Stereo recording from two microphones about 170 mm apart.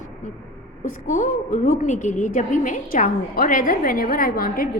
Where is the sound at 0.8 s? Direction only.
50° left (ahead or behind).